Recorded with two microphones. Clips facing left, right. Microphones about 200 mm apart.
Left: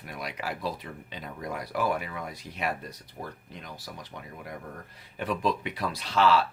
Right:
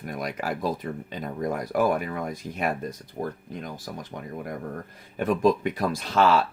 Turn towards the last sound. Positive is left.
turn(degrees=-50)  # may be behind; listen again after turning